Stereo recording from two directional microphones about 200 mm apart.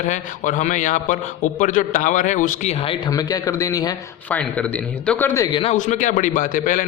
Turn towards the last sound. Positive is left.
turn(degrees=40)  # may be behind; listen again after turning